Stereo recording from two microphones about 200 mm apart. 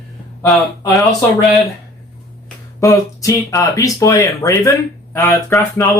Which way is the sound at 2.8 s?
15° left (ahead or behind).